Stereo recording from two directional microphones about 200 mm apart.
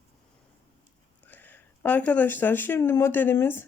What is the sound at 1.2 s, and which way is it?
A woman's voice, 10° left (ahead or behind).